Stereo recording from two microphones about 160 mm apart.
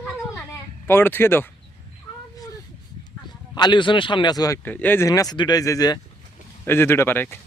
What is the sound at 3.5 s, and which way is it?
Speech, 30° left (ahead or behind).